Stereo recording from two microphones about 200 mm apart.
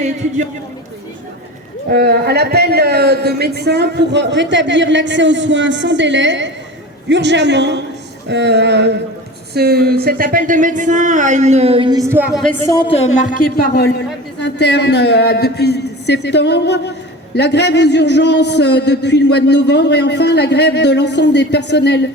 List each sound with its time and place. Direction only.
1.9 s speech: 50° right (ahead or behind); by 12.5 s 5° right (ahead or behind)
12.5 s a woman's voice: 15° left (ahead or behind)
14.4 s a man's voice: 60° left (ahead or behind)